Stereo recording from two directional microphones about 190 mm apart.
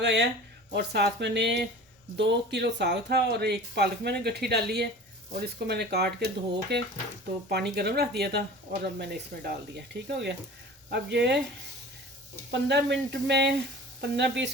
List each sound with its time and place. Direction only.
0.0 s speech: 65° right (ahead or behind)
12.5 s speech: 65° right (ahead or behind)